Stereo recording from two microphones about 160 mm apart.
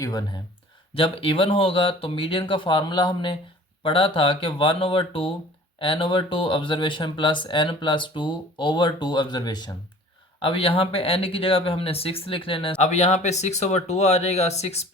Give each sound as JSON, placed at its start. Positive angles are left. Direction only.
{"t": 0.0, "sound": "speech", "side_deg": 25}
{"t": 0.9, "sound": "speech", "side_deg": 35}